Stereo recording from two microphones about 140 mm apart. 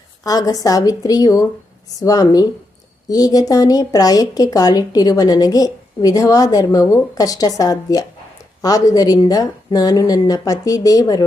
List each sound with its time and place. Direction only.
0.3 s a woman's voice: 25° left (ahead or behind)